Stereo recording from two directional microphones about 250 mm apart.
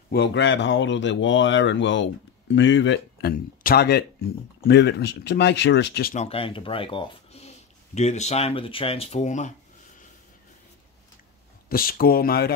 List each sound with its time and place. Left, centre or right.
0.1 s speech: left
6.1 s speech: left
11.7 s speech: left